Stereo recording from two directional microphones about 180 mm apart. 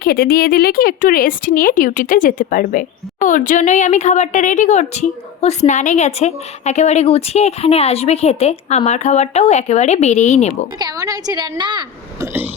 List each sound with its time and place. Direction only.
0.0 s a woman's voice: 60° left (ahead or behind); by 10.5 s 40° left (ahead or behind)
10.8 s speech: 20° right (ahead or behind)